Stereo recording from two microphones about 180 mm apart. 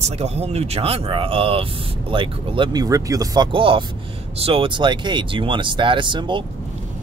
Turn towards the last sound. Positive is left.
turn(degrees=-25)  # may be behind; listen again after turning